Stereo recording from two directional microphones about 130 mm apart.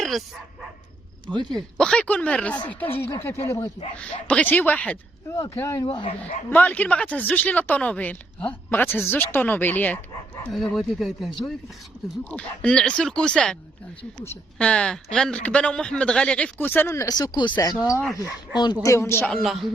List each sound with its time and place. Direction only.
0.0 s bow-wow: centre (ahead or behind)
1.3 s speech: 35° right (ahead or behind)
1.5 s speech: 5° left (ahead or behind); by 3.7 s 20° left (ahead or behind)
3.9 s speech: 10° left (ahead or behind)
5.3 s speech: 25° left (ahead or behind)
6.5 s speech: 10° left (ahead or behind)
10.5 s speech: centre (ahead or behind)
14.6 s speech: 5° left (ahead or behind)
19.2 s speech: centre (ahead or behind)